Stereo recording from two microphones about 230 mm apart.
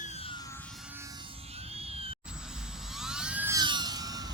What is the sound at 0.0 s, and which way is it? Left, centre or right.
Music, left.